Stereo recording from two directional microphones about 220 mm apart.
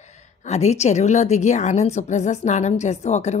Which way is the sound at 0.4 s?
30° left (ahead or behind).